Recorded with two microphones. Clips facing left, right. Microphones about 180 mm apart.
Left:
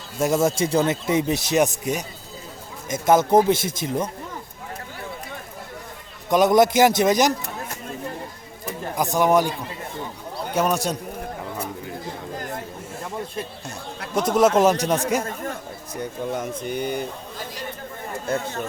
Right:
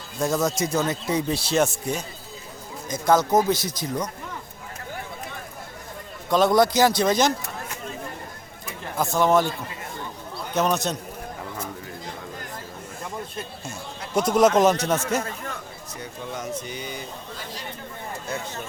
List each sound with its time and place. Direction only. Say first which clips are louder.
0.2 s speech: left 3 dB; 25° left (ahead or behind)
3.2 s speech: left 4 dB; 25° left (ahead or behind)
6.3 s speech: left 2 dB; 20° left (ahead or behind)
9.0 s a man's voice: left 1 dB; 15° left (ahead or behind)
14.2 s a man's voice: even; centre (ahead or behind)
15.2 s speech: left 3 dB; 45° left (ahead or behind)
18.3 s speech: left 7 dB; 55° left (ahead or behind)